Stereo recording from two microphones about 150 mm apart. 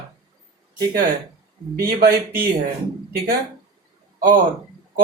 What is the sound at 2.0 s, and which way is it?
Speech, 90° right.